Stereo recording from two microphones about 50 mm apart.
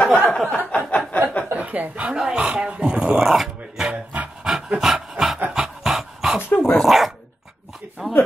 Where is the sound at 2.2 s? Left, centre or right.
Centre.